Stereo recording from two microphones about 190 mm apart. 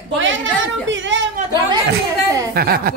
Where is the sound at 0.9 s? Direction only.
75° right (ahead or behind).